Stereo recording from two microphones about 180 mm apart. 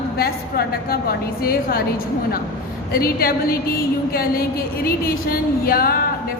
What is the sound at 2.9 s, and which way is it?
A woman's voice, 55° left (ahead or behind).